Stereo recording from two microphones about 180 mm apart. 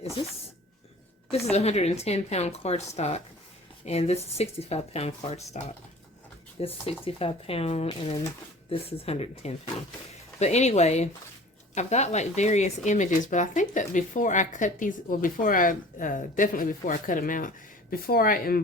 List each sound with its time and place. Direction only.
0.2 s a woman's voice: 25° left (ahead or behind)
6.6 s a woman's voice: 35° left (ahead or behind); by 18.6 s 55° left (ahead or behind)